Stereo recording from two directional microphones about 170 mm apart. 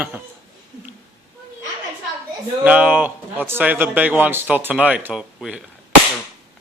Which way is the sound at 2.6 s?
10° right (ahead or behind).